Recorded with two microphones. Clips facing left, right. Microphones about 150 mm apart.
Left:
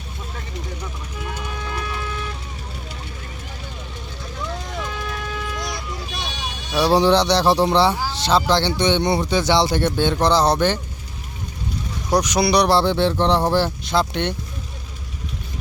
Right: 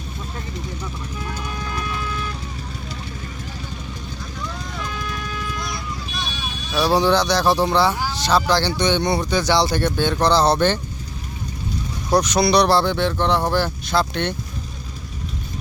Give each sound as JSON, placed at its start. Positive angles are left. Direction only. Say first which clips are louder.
{"t": 6.7, "sound": "speech", "louder": "left 2 dB", "side_deg": 25}
{"t": 12.1, "sound": "speech", "louder": "right 1 dB", "side_deg": 15}